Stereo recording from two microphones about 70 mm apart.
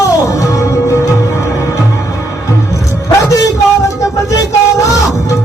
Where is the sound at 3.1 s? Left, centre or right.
Left.